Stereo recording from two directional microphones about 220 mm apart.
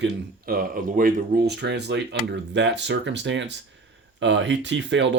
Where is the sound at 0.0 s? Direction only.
40° right (ahead or behind).